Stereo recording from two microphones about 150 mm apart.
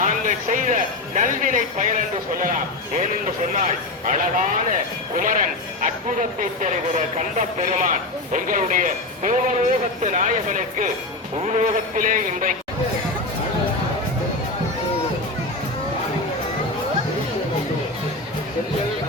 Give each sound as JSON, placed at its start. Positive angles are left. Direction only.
{"t": 0.0, "sound": "speech", "side_deg": -60}